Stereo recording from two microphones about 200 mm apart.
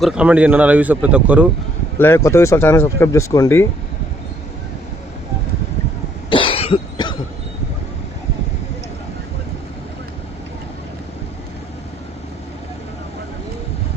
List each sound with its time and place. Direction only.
0.0 s a man's voice: 5° right (ahead or behind)
2.0 s speech: 10° left (ahead or behind)
6.3 s cough: 25° left (ahead or behind)